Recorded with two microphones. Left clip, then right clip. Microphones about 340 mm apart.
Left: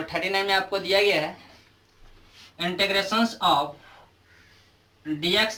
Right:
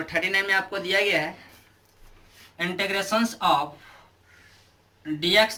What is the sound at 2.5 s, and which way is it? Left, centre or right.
Speech, centre.